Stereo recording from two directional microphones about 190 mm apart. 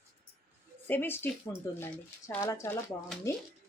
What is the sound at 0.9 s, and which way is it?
Speech, 10° left (ahead or behind).